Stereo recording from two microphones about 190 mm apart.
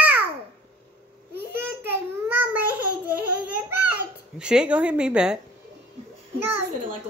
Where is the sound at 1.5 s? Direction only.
10° right (ahead or behind).